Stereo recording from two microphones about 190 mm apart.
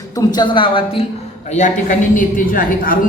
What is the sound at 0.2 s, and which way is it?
Speech, 25° left (ahead or behind).